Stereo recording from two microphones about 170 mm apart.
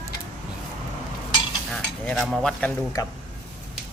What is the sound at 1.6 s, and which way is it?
Speech, 5° left (ahead or behind).